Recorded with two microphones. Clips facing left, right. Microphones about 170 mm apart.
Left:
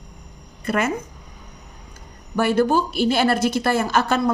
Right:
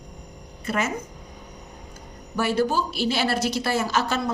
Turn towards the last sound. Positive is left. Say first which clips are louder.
# left 5 dB
turn(degrees=55)  # may be behind; listen again after turning